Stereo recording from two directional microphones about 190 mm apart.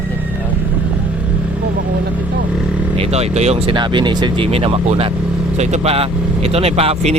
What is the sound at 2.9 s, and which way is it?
Speech, 30° right (ahead or behind).